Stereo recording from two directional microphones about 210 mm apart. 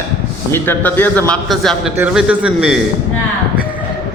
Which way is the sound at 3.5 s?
10° right (ahead or behind).